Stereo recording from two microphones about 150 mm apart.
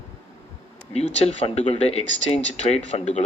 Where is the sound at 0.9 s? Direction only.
45° left (ahead or behind).